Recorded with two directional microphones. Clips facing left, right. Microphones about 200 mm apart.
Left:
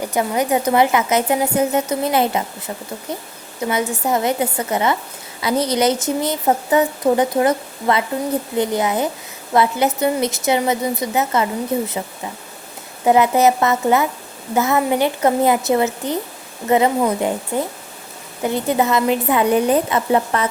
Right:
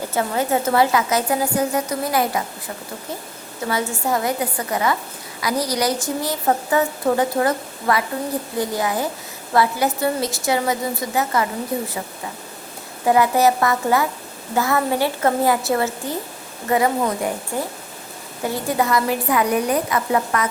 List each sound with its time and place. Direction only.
0.0 s speech: 15° left (ahead or behind)
3.6 s speech: 20° left (ahead or behind)
13.1 s speech: 20° left (ahead or behind)
18.4 s speech: 20° left (ahead or behind)